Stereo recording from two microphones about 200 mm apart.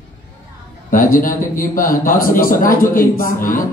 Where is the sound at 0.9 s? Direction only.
45° left (ahead or behind).